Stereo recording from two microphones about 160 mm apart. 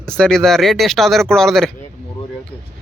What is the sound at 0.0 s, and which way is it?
Speech, 5° left (ahead or behind).